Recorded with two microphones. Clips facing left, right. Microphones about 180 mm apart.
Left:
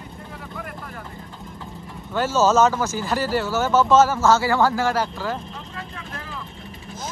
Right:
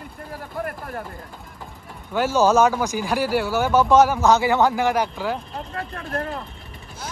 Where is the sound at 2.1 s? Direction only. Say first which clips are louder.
Right 1 dB; 10° right (ahead or behind).